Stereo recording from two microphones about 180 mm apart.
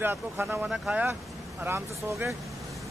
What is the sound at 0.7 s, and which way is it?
Speech, centre (ahead or behind).